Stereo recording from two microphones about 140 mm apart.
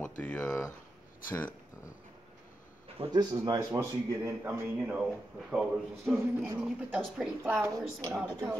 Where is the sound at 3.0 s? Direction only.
40° right (ahead or behind).